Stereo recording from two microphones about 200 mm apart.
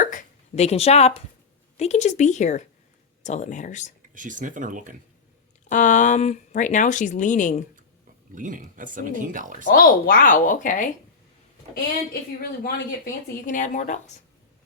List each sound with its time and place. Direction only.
0.0 s hiccup: 40° left (ahead or behind)
1.8 s speech: 35° left (ahead or behind)
4.1 s speech: 40° right (ahead or behind)
5.6 s speech: 40° left (ahead or behind)
8.4 s speech: 40° right (ahead or behind)
9.6 s speech: 45° left (ahead or behind)
12.4 s speech: 50° left (ahead or behind)